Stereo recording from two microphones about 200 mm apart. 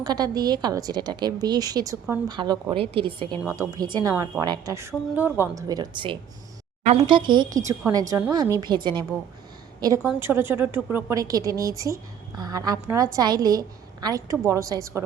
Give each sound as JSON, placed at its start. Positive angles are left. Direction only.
{"t": 0.0, "sound": "a woman's voice", "side_deg": -20}
{"t": 3.4, "sound": "a woman's voice", "side_deg": -15}